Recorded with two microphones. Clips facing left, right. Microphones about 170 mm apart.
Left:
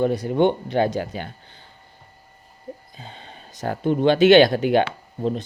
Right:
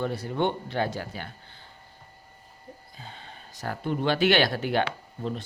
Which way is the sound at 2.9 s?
20° left (ahead or behind).